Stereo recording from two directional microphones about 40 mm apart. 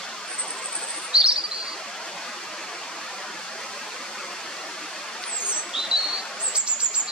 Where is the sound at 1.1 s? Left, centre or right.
Right.